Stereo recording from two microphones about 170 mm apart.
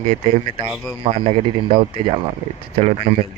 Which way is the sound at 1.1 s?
40° right (ahead or behind).